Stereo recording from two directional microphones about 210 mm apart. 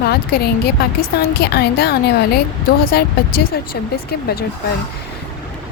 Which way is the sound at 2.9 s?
45° left (ahead or behind).